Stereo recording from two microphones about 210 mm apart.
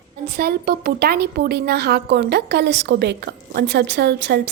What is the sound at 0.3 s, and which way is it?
Speech, 45° right (ahead or behind).